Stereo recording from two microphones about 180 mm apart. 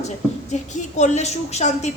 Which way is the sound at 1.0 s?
40° left (ahead or behind).